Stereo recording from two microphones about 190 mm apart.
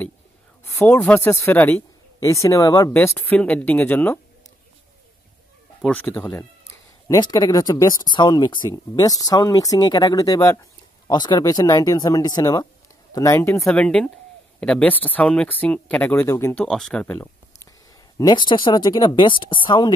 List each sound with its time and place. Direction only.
0.7 s speech: 10° left (ahead or behind)
2.1 s speech: 25° left (ahead or behind)
5.8 s speech: 5° left (ahead or behind)
7.1 s speech: 20° left (ahead or behind)
13.6 s speech: 5° left (ahead or behind)
18.1 s speech: 20° left (ahead or behind)